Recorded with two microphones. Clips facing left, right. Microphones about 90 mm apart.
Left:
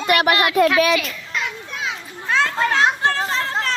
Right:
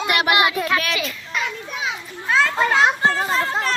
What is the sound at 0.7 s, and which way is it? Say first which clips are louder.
Children playing: left 5 dB; centre (ahead or behind).